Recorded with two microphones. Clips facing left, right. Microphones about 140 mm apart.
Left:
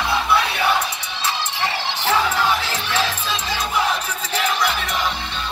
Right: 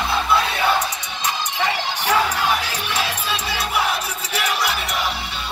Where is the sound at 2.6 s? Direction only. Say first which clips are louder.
Left 2 dB; 10° right (ahead or behind).